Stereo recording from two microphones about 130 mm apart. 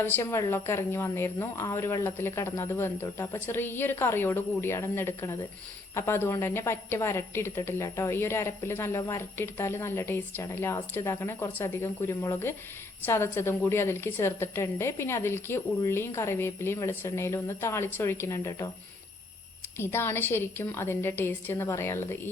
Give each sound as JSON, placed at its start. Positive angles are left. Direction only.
{"t": 0.0, "sound": "a woman's voice", "side_deg": 20}
{"t": 19.7, "sound": "a woman's voice", "side_deg": 20}